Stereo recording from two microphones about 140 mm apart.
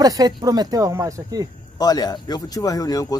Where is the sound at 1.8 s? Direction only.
30° left (ahead or behind).